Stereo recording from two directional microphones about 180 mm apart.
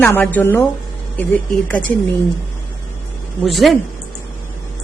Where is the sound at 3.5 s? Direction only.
Centre (ahead or behind).